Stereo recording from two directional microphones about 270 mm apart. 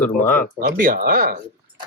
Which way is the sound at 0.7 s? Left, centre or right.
Right.